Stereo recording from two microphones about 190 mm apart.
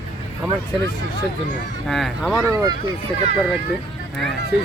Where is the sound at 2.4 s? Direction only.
15° right (ahead or behind).